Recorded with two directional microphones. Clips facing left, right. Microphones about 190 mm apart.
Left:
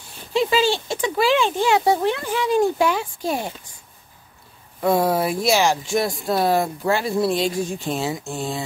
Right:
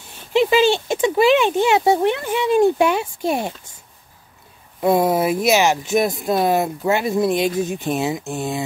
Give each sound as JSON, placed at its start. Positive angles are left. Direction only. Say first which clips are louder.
{"t": 0.3, "sound": "speech", "louder": "right 4 dB", "side_deg": -20}
{"t": 4.8, "sound": "speech", "louder": "right 2 dB", "side_deg": -20}